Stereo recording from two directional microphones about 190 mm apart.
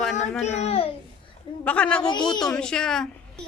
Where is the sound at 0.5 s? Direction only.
35° left (ahead or behind).